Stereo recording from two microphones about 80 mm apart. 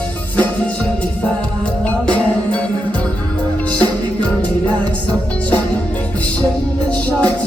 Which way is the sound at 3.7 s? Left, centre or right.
Right.